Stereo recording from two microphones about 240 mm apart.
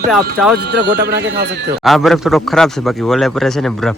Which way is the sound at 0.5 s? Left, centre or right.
Right.